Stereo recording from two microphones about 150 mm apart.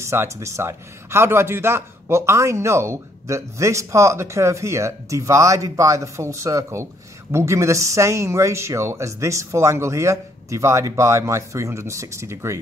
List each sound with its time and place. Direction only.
0.0 s a man's voice: 20° right (ahead or behind)